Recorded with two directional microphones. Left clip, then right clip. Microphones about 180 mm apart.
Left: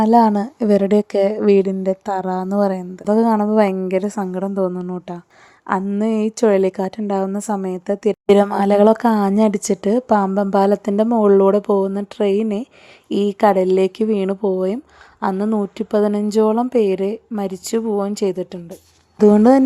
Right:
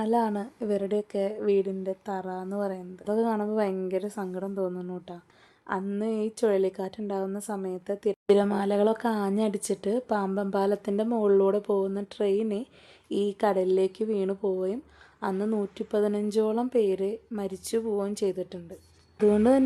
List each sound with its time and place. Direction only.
0.0 s a woman's voice: 45° left (ahead or behind)